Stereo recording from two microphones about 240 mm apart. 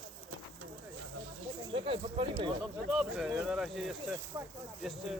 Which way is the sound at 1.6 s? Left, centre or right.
Right.